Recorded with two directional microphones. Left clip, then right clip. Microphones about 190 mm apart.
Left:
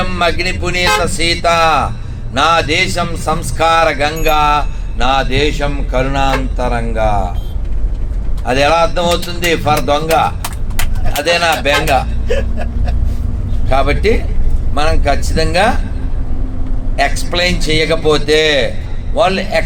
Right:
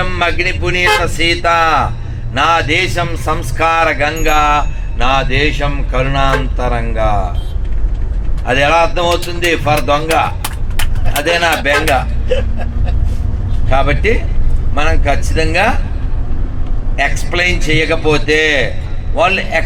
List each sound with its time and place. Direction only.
0.0 s a man's voice: 15° left (ahead or behind)
8.4 s a man's voice: 15° left (ahead or behind)
13.7 s a man's voice: 20° left (ahead or behind)
17.0 s a man's voice: 20° left (ahead or behind)